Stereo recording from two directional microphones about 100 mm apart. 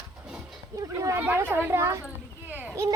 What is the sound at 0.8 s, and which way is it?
Speech, 35° right (ahead or behind).